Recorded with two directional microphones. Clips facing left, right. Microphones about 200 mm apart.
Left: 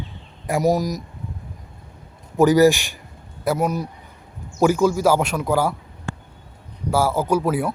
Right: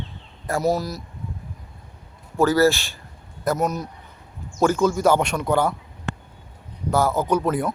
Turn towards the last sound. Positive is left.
turn(degrees=5)  # may be behind; listen again after turning